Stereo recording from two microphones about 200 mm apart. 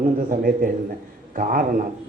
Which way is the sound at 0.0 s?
45° right (ahead or behind).